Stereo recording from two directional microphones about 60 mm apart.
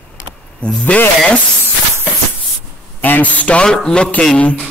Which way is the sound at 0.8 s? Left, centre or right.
Left.